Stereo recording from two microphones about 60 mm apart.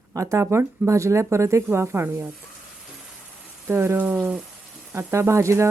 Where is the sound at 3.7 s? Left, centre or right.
Right.